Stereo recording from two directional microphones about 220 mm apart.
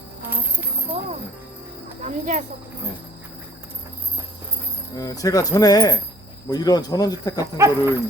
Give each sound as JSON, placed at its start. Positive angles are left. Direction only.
{"t": 0.2, "sound": "speech", "side_deg": -10}
{"t": 2.0, "sound": "speech", "side_deg": -35}
{"t": 4.9, "sound": "speech", "side_deg": 15}
{"t": 7.5, "sound": "speech", "side_deg": -10}